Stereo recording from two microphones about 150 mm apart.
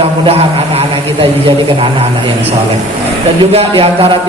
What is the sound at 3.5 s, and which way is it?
Speech, 40° right (ahead or behind).